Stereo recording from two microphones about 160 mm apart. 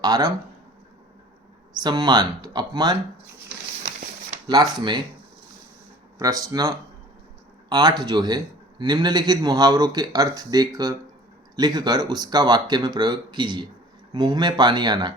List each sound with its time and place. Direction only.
0.0 s speech: 25° right (ahead or behind)
1.8 s speech: 25° right (ahead or behind)
4.4 s speech: 25° right (ahead or behind)
6.1 s speech: 20° right (ahead or behind)